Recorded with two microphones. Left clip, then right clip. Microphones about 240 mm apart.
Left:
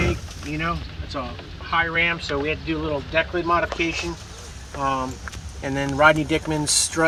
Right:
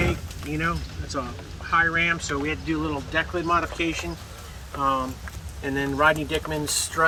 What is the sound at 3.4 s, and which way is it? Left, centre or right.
Speech, left.